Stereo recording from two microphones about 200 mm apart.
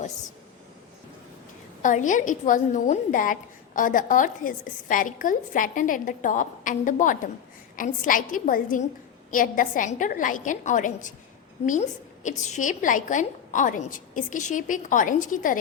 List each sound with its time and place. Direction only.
1.8 s a woman's voice: 40° left (ahead or behind)